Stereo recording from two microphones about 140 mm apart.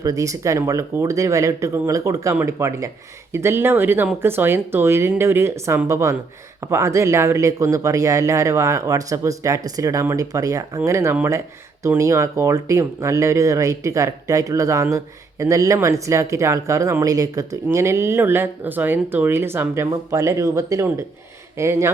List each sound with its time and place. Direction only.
0.0 s speech: 25° right (ahead or behind)